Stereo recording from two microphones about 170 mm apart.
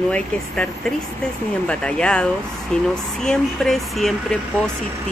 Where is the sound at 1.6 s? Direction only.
5° left (ahead or behind).